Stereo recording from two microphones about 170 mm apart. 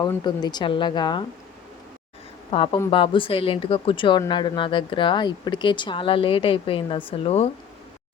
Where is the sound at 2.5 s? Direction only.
35° left (ahead or behind).